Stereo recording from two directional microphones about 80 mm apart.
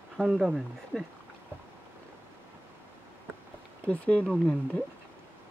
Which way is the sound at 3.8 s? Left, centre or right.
Centre.